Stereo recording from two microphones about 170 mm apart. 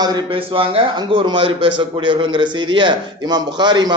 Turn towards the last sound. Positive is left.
turn(degrees=-25)  # may be behind; listen again after turning